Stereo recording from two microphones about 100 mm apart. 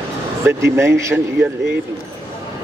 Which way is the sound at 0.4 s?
25° right (ahead or behind).